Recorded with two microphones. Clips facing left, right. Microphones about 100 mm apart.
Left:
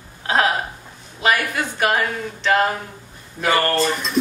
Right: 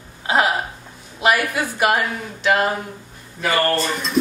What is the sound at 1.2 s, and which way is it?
A woman's voice, 10° right (ahead or behind).